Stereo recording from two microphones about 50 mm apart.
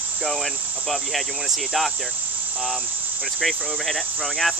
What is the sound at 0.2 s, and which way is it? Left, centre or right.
Speech, centre.